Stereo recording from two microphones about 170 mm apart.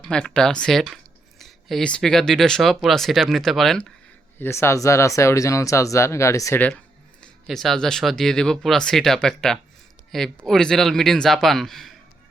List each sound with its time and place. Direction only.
0.0 s speech: 5° left (ahead or behind)
4.4 s speech: 15° left (ahead or behind)
7.2 s speech: centre (ahead or behind)